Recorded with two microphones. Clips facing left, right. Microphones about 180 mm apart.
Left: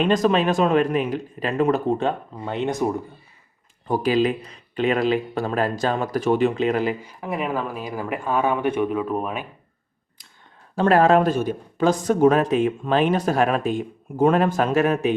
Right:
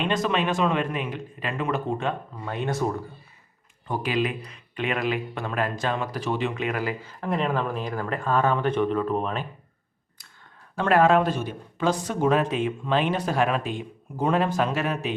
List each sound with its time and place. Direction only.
0.0 s speech: 40° left (ahead or behind)
2.4 s speech: 25° left (ahead or behind)
3.8 s speech: 40° left (ahead or behind)
6.5 s speech: 30° left (ahead or behind)
7.0 s speech: 10° left (ahead or behind)
10.8 s a man's voice: 35° left (ahead or behind)